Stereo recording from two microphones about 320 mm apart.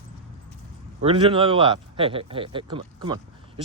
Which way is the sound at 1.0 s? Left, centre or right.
Centre.